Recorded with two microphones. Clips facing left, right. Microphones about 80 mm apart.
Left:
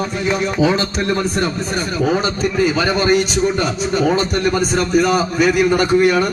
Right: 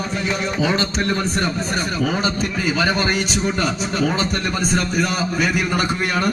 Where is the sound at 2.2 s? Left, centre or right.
Centre.